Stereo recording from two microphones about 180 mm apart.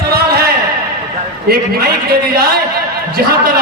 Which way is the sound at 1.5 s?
60° right (ahead or behind).